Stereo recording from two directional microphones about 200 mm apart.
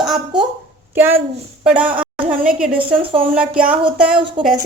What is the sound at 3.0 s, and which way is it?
Speech, 25° right (ahead or behind).